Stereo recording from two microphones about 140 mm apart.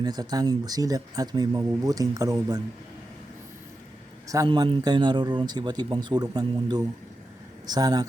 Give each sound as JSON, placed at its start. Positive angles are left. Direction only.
{"t": 0.0, "sound": "speech", "side_deg": -30}
{"t": 4.4, "sound": "speech", "side_deg": -35}